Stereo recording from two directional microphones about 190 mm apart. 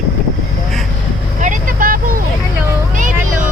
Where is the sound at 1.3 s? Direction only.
40° right (ahead or behind).